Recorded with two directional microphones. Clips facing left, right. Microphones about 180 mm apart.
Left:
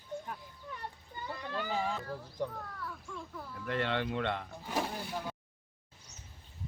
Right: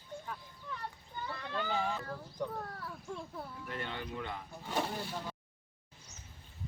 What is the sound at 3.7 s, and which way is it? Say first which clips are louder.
Speech: left 10 dB; 90° left.